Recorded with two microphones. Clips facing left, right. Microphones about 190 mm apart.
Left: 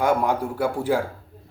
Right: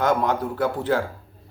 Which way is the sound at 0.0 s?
10° left (ahead or behind).